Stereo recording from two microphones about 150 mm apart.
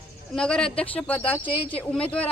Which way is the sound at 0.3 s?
5° left (ahead or behind).